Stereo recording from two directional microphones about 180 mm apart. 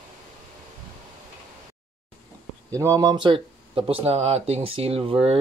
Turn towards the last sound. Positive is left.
turn(degrees=-30)  # may be behind; listen again after turning